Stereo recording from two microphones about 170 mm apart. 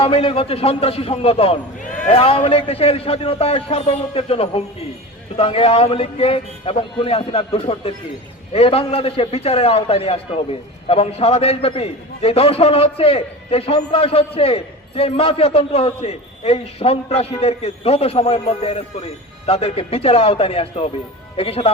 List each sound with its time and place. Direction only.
0.0 s a man's voice: 35° left (ahead or behind)